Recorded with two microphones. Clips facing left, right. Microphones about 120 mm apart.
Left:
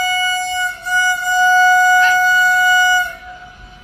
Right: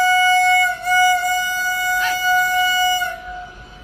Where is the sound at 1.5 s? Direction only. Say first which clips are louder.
Left 11 dB; 85° left.